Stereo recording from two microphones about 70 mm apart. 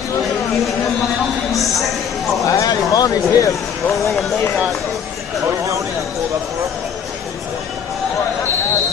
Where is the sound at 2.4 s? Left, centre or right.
Left.